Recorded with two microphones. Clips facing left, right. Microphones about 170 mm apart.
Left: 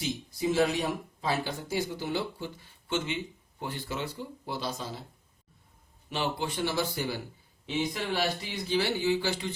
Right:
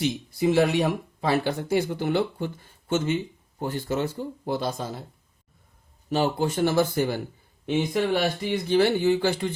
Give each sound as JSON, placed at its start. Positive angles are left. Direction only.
{"t": 0.0, "sound": "speech", "side_deg": -70}
{"t": 6.1, "sound": "speech", "side_deg": -45}